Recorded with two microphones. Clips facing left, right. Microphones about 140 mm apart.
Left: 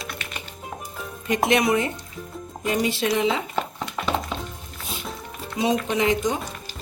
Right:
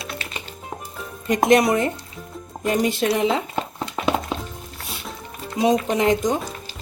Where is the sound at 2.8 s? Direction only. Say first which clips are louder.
Right 2 dB; 50° right (ahead or behind).